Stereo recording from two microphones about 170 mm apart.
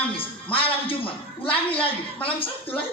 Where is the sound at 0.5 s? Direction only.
30° left (ahead or behind).